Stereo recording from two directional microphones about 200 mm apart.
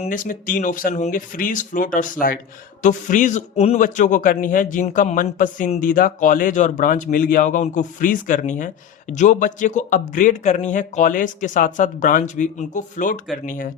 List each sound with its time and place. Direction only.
0.0 s a man's voice: 40° left (ahead or behind)